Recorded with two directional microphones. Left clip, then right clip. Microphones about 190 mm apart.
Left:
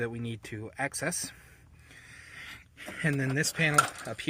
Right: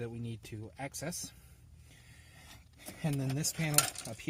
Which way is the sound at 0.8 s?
15° left (ahead or behind).